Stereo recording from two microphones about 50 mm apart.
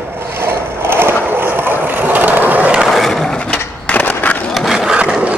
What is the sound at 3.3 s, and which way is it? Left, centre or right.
Skateboard, left.